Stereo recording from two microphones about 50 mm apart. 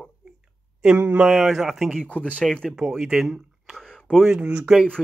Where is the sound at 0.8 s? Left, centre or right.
Right.